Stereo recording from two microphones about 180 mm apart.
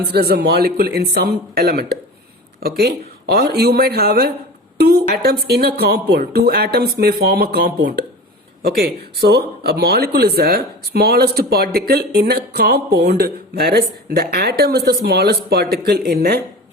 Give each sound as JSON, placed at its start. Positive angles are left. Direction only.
{"t": 0.1, "sound": "speech", "side_deg": -60}